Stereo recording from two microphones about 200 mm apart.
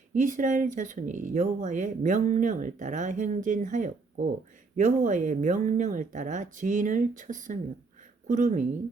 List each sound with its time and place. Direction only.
0.1 s speech: 40° right (ahead or behind)